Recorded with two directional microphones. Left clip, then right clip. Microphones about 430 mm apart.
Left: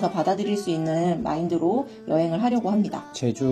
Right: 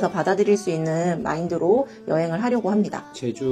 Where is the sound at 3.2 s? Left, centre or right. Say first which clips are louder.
Left 3 dB; left.